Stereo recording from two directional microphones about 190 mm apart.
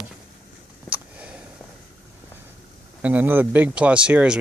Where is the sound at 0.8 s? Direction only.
5° right (ahead or behind).